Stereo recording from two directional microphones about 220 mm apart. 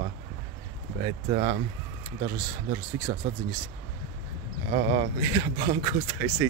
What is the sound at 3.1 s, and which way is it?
Speech, 20° right (ahead or behind).